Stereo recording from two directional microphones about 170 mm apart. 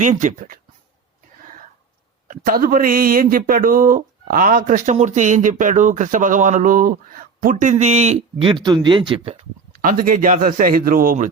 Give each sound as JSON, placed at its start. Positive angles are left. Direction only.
{"t": 0.0, "sound": "a man's voice", "side_deg": -45}
{"t": 2.2, "sound": "a man's voice", "side_deg": -55}
{"t": 9.8, "sound": "speech", "side_deg": -55}